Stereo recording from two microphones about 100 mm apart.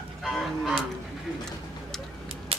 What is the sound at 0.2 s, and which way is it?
Livestock, centre (ahead or behind).